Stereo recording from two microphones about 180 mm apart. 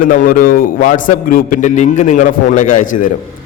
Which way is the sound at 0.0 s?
50° left (ahead or behind).